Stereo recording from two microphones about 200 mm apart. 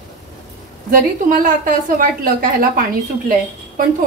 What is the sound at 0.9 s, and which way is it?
A woman's voice, 40° right (ahead or behind).